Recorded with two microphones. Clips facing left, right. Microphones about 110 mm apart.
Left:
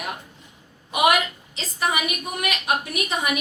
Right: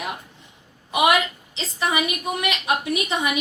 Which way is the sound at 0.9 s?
20° right (ahead or behind).